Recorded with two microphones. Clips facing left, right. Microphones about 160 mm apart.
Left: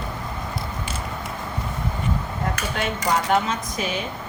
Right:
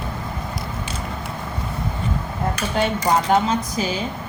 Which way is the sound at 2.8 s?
30° right (ahead or behind).